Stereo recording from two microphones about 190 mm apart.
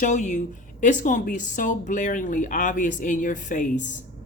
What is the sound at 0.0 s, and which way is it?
A woman's voice, 40° left (ahead or behind).